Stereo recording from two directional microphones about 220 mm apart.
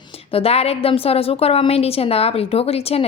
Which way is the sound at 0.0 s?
25° left (ahead or behind).